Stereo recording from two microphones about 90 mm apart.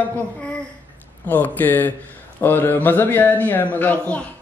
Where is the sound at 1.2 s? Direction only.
20° left (ahead or behind).